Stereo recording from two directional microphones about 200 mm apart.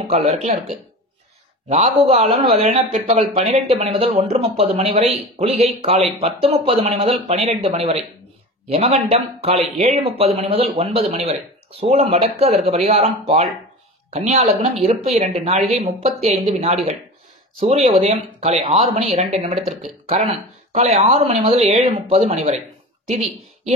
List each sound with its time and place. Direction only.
0.1 s speech: 35° right (ahead or behind)